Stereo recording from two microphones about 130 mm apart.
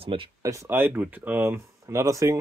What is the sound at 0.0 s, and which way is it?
Speech, 40° right (ahead or behind).